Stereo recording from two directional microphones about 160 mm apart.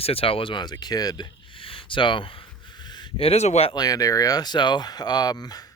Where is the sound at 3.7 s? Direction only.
25° left (ahead or behind).